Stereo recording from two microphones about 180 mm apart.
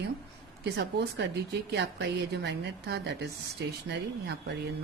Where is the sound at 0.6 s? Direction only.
75° right (ahead or behind).